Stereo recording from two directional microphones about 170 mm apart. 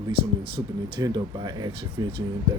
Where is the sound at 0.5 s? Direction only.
25° right (ahead or behind).